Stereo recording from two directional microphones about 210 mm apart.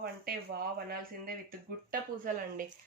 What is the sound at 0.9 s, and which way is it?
Speech, 45° right (ahead or behind).